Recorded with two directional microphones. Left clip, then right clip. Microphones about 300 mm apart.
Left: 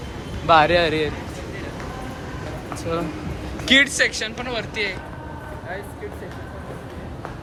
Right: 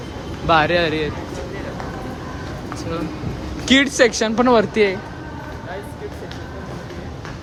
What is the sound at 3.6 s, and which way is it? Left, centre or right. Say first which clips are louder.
Speech: right 2 dB; centre.